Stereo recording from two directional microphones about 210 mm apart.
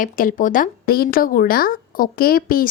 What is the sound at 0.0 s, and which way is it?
Speech, 40° left (ahead or behind).